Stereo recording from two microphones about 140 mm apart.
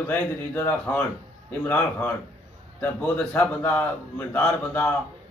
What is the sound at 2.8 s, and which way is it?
A man's voice, 10° left (ahead or behind).